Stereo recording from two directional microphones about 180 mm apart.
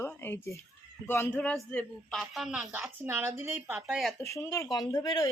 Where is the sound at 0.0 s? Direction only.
10° left (ahead or behind).